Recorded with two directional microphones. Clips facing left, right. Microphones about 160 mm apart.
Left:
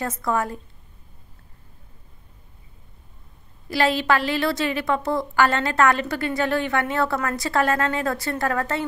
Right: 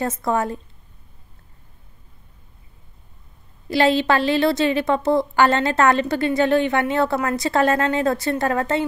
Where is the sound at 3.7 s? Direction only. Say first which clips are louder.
Right 3 dB; 25° right (ahead or behind).